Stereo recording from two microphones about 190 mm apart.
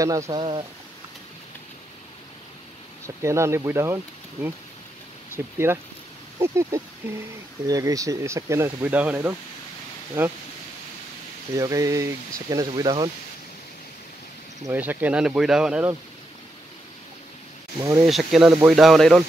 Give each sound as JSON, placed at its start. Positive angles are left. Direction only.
{"t": 0.0, "sound": "speech", "side_deg": -20}
{"t": 3.2, "sound": "speech", "side_deg": -15}
{"t": 11.5, "sound": "speech", "side_deg": -15}
{"t": 14.7, "sound": "speech", "side_deg": -10}
{"t": 18.0, "sound": "speech", "side_deg": 0}